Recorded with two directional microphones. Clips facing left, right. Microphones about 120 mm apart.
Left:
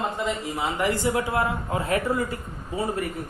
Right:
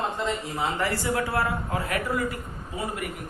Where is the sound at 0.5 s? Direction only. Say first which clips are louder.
Left 2 dB; 15° left (ahead or behind).